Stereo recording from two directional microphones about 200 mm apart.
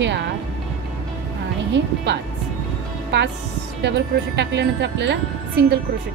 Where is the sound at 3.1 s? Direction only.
60° right (ahead or behind).